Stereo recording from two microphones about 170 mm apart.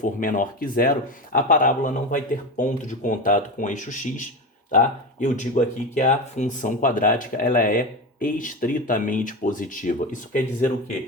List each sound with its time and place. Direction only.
0.0 s speech: 50° left (ahead or behind)